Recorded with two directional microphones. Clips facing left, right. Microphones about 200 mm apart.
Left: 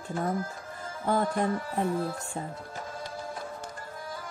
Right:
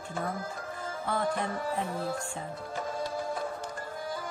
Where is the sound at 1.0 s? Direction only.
40° left (ahead or behind).